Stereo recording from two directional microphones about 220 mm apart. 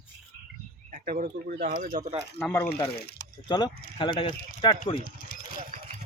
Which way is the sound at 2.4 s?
10° left (ahead or behind).